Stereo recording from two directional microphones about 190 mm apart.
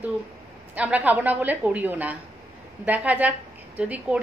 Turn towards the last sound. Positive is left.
turn(degrees=-10)  # may be behind; listen again after turning